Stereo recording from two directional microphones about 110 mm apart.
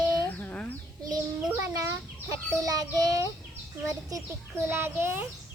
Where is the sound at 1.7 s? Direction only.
30° right (ahead or behind).